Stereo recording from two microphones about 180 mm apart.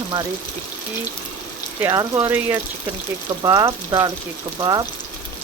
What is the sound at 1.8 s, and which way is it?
Speech, 20° right (ahead or behind).